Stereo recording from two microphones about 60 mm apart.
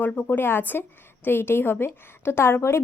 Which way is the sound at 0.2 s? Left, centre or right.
Left.